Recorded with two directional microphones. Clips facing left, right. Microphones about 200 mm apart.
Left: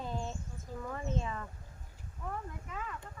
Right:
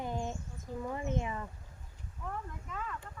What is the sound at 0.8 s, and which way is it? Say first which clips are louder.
Speech: right 2 dB; 15° right (ahead or behind).